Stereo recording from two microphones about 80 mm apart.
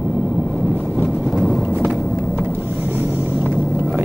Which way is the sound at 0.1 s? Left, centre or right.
Centre.